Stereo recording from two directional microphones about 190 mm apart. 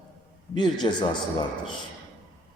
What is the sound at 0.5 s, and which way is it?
Speech, 25° left (ahead or behind).